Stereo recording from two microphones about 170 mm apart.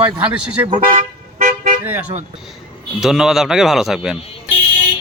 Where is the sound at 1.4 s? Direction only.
55° right (ahead or behind).